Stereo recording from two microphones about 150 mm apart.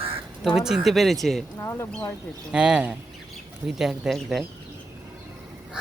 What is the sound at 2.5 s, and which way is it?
Speech, 5° right (ahead or behind).